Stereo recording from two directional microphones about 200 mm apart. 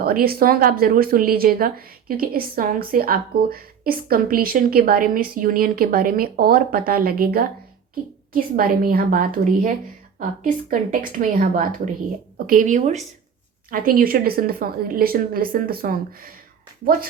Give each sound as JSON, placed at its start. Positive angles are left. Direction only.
{"t": 0.0, "sound": "a woman's voice", "side_deg": -50}
{"t": 13.7, "sound": "speech", "side_deg": -45}